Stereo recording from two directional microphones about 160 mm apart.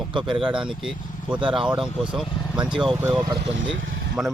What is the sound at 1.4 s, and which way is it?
Speech, 30° right (ahead or behind).